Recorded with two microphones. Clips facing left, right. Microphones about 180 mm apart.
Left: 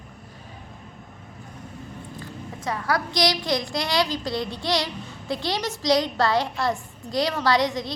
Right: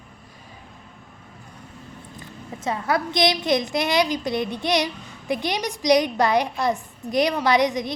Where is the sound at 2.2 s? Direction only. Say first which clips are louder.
Left 1 dB; 20° right (ahead or behind).